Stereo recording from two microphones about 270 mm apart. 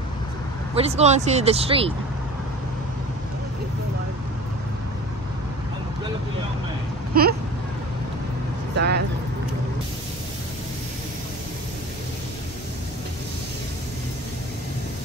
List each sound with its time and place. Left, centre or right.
0.7 s speech: right
7.2 s vehicle: right
8.7 s vehicle: right